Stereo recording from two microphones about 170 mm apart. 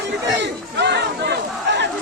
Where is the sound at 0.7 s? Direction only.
85° right.